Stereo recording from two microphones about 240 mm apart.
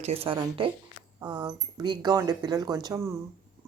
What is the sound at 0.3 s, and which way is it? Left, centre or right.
Speech, right.